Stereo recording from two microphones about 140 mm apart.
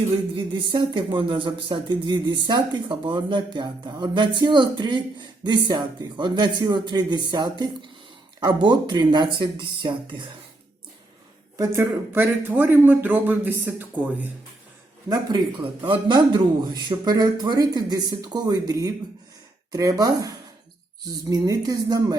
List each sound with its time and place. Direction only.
0.3 s speech: 35° right (ahead or behind)
11.5 s a man's voice: 20° right (ahead or behind)
15.3 s speech: 30° right (ahead or behind)